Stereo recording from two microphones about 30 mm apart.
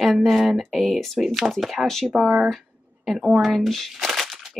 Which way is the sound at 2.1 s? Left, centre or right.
Right.